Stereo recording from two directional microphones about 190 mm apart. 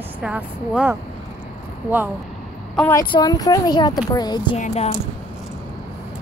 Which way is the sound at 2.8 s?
15° left (ahead or behind).